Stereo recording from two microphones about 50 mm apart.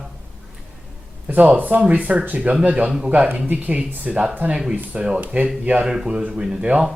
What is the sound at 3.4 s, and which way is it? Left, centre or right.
Speech, right.